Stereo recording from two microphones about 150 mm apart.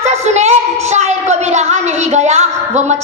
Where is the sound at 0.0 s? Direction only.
50° right (ahead or behind).